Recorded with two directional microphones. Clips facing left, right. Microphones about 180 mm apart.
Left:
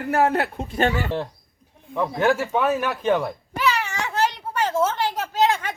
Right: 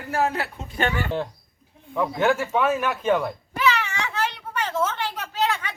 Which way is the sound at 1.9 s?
Centre (ahead or behind).